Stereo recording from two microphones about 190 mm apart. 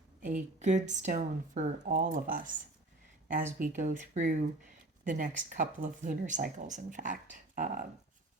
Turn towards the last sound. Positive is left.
turn(degrees=-45)  # may be behind; listen again after turning